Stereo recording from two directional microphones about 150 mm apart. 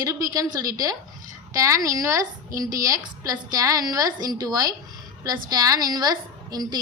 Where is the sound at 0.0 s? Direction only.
25° right (ahead or behind).